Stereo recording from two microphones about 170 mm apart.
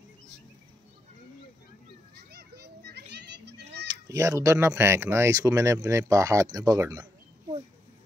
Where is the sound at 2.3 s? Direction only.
70° right (ahead or behind).